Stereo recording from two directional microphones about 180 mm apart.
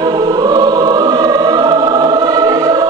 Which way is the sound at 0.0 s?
20° right (ahead or behind).